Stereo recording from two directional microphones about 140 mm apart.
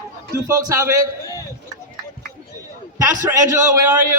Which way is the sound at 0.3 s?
20° right (ahead or behind).